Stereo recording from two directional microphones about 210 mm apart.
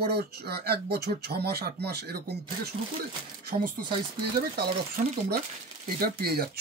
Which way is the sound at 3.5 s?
45° right (ahead or behind).